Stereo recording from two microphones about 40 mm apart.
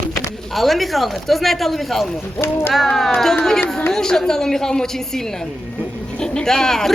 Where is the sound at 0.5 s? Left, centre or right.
Centre.